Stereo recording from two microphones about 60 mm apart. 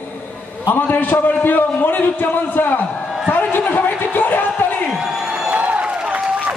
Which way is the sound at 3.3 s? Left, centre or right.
Left.